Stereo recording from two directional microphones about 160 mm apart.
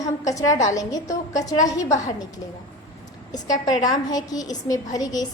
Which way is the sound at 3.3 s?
25° left (ahead or behind).